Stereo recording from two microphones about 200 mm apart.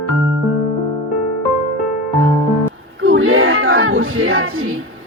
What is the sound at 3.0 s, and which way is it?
Child singing, 85° right.